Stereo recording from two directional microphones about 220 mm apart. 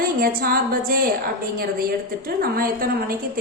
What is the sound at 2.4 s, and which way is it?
A woman's voice, 40° right (ahead or behind).